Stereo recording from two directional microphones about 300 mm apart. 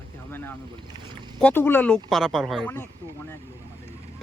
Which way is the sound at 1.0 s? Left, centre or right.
Centre.